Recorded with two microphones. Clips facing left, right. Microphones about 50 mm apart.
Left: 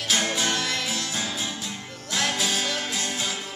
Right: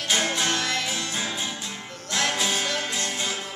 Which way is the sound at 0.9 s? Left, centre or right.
Centre.